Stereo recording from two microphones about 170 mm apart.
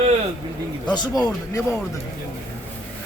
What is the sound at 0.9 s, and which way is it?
Speech, 25° left (ahead or behind).